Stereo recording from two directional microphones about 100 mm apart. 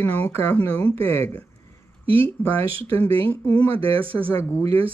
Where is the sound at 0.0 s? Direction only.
20° left (ahead or behind).